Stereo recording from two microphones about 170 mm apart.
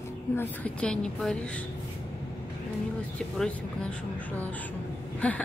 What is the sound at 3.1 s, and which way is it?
Speech, 5° left (ahead or behind).